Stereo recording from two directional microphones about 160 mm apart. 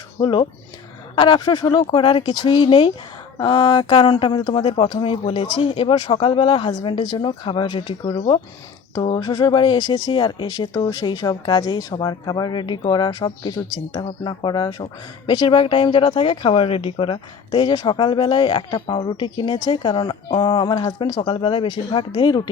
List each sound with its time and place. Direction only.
0.2 s speech: 30° left (ahead or behind)